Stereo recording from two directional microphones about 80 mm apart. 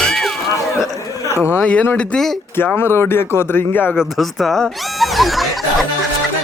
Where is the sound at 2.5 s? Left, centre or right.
Left.